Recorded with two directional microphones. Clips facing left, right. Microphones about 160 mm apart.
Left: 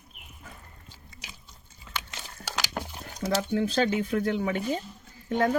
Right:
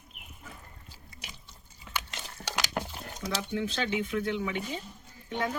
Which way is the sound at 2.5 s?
5° left (ahead or behind).